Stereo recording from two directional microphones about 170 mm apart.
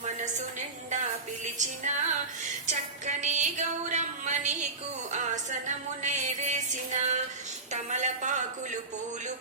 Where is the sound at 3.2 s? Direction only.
45° right (ahead or behind).